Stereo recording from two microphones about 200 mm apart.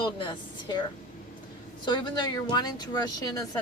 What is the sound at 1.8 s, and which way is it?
Speech, 20° left (ahead or behind).